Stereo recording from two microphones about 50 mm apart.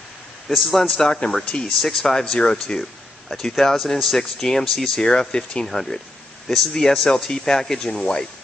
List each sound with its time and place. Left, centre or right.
0.5 s a man's voice: centre
0.8 s speech: centre